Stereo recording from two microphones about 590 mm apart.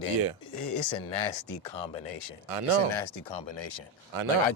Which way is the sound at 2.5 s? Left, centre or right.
Right.